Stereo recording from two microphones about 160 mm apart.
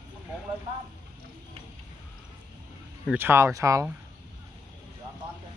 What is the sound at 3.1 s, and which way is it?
Speech, 15° right (ahead or behind).